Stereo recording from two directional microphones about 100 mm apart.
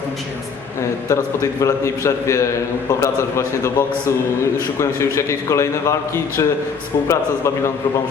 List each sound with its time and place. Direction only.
0.8 s a man's voice: 30° left (ahead or behind)